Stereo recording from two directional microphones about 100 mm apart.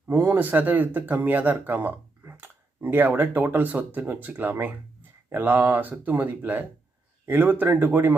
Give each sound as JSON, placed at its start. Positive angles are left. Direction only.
{"t": 0.3, "sound": "speech", "side_deg": -15}